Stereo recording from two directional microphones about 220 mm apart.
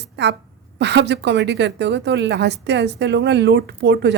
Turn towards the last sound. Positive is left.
turn(degrees=-50)  # may be behind; listen again after turning